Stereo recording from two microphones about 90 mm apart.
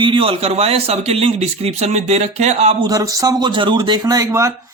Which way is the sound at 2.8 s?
40° right (ahead or behind).